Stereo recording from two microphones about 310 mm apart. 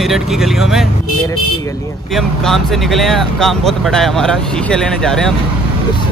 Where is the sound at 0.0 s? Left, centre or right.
Centre.